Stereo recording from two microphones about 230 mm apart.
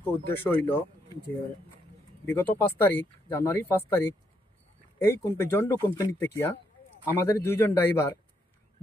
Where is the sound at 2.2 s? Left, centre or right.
Centre.